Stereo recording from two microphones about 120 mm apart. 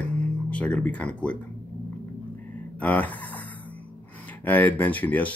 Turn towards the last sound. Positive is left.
turn(degrees=15)  # may be behind; listen again after turning